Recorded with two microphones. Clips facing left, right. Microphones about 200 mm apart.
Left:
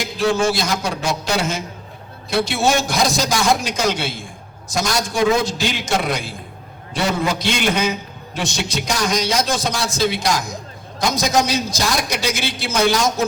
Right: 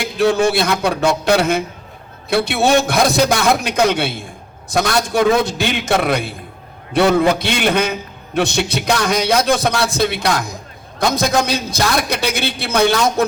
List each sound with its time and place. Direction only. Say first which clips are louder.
0.0 s a man's voice: right 4 dB; 60° right (ahead or behind)